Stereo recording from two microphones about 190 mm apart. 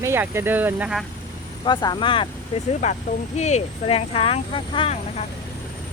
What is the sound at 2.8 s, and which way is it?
Speech, 35° left (ahead or behind).